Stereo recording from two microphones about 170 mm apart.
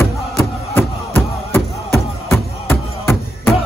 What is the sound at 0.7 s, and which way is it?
Music, 15° left (ahead or behind).